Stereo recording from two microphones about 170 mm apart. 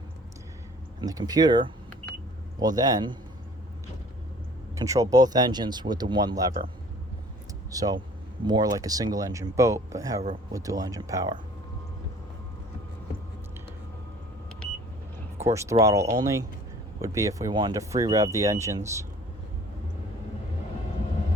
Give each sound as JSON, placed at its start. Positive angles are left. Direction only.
{"t": 1.0, "sound": "speech", "side_deg": -20}
{"t": 4.7, "sound": "speech", "side_deg": -20}
{"t": 7.7, "sound": "speech", "side_deg": -20}
{"t": 15.4, "sound": "speech", "side_deg": -15}